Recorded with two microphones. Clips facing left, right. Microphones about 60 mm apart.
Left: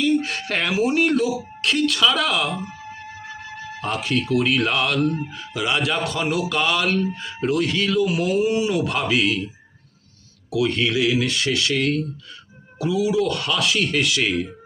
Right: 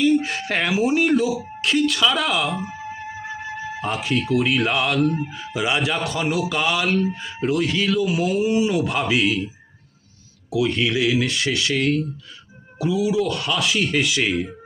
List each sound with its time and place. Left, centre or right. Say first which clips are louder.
0.0 s a man's voice: right 2 dB; centre
10.5 s a man's voice: even; centre
14.3 s speech: even; centre